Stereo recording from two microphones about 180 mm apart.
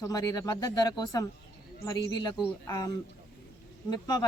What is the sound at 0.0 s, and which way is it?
A woman's voice, 20° left (ahead or behind).